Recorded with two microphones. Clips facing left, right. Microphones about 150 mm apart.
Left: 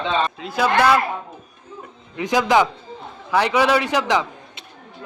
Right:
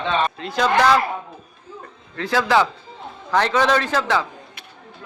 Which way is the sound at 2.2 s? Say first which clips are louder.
Left 1 dB; 15° left (ahead or behind).